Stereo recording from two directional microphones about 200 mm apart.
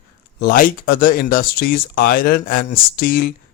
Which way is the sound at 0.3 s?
45° left (ahead or behind).